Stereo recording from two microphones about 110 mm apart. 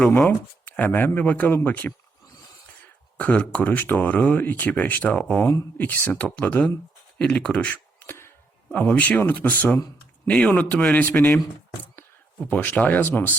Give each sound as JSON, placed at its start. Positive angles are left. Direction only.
{"t": 0.3, "sound": "speech", "side_deg": 15}
{"t": 3.2, "sound": "speech", "side_deg": 15}
{"t": 7.7, "sound": "a sound", "side_deg": 20}
{"t": 8.7, "sound": "speech", "side_deg": 15}
{"t": 12.5, "sound": "speech", "side_deg": 15}